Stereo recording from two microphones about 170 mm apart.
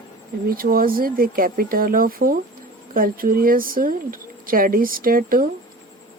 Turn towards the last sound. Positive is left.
turn(degrees=-55)  # may be behind; listen again after turning